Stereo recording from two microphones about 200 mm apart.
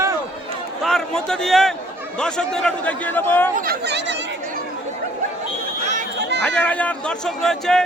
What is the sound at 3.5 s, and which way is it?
Speech, 45° right (ahead or behind).